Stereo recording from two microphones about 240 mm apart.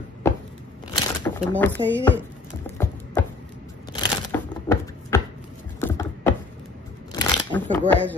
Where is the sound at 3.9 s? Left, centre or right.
Centre.